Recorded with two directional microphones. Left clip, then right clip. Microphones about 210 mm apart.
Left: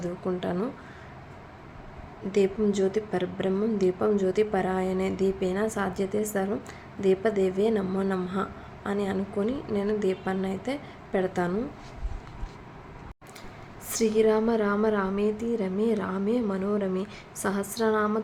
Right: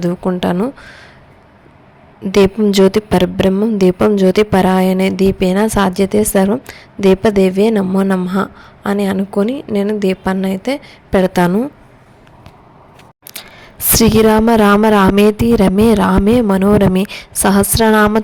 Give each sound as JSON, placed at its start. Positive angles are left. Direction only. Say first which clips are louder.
{"t": 0.0, "sound": "a woman's voice", "louder": "right 13 dB", "side_deg": -45}
{"t": 2.3, "sound": "a woman's voice", "louder": "right 13 dB", "side_deg": -45}
{"t": 13.9, "sound": "a woman's voice", "louder": "right 12 dB", "side_deg": -45}